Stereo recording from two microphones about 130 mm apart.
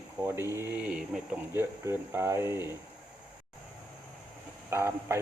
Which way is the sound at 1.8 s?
20° right (ahead or behind).